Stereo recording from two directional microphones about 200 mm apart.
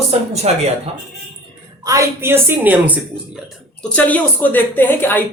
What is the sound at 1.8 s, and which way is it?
A woman's voice, 15° right (ahead or behind).